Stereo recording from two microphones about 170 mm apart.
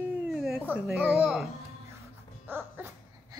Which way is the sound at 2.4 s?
10° right (ahead or behind).